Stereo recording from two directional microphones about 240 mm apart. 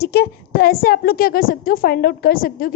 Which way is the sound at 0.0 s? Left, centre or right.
Left.